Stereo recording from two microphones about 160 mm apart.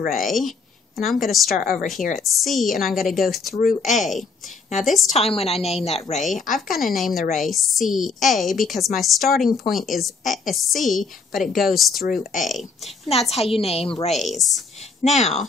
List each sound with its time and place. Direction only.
0.1 s a woman's voice: centre (ahead or behind)
1.6 s speech: 55° left (ahead or behind)
2.1 s a woman's voice: centre (ahead or behind)
3.5 s speech: 60° left (ahead or behind)
3.9 s a woman's voice: centre (ahead or behind)
5.1 s a woman's voice: 40° left (ahead or behind)
6.5 s a woman's voice: centre (ahead or behind)
12.0 s speech: 65° left (ahead or behind)
12.4 s a woman's voice: centre (ahead or behind)
13.3 s a woman's voice: 40° left (ahead or behind)
14.1 s a woman's voice: centre (ahead or behind)
15.0 s speech: 45° left (ahead or behind)